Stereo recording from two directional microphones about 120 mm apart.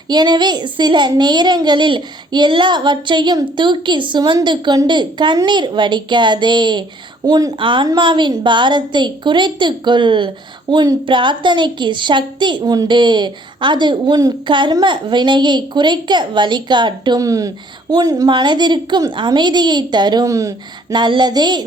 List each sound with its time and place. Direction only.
0.1 s a woman's voice: 35° right (ahead or behind)
20.9 s a woman's voice: 40° right (ahead or behind)